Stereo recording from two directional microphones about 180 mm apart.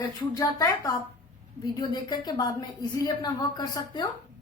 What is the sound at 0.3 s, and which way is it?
A woman's voice, 20° left (ahead or behind).